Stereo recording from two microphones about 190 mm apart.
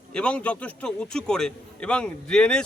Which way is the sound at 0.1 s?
5° left (ahead or behind).